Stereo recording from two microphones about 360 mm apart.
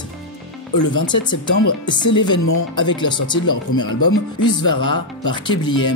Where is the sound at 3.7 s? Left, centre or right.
Left.